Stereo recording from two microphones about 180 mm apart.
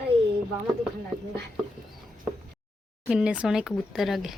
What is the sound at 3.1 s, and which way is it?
Speech, 5° right (ahead or behind).